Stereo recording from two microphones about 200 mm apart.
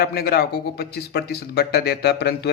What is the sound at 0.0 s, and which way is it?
Speech, 50° left (ahead or behind).